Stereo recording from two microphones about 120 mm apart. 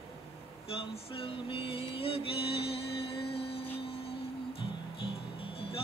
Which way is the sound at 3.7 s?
55° left (ahead or behind).